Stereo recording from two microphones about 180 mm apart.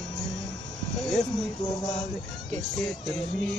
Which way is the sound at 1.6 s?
20° left (ahead or behind).